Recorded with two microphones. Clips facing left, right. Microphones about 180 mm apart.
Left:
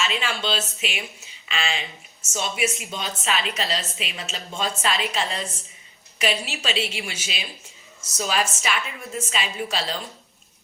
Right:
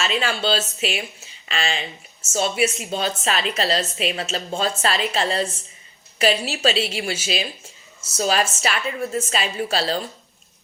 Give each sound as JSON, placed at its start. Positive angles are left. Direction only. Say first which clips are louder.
{"t": 0.0, "sound": "a woman's voice", "louder": "right 4 dB", "side_deg": -40}